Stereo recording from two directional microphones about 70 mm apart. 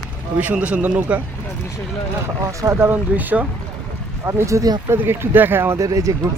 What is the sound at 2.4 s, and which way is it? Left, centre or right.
Speech, right.